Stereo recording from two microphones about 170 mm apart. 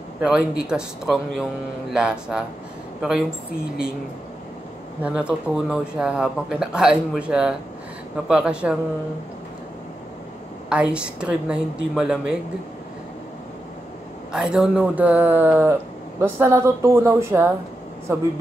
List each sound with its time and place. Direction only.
0.2 s speech: 5° right (ahead or behind)
5.0 s speech: 5° right (ahead or behind)
10.7 s speech: 5° right (ahead or behind)
14.3 s a man's voice: 5° right (ahead or behind)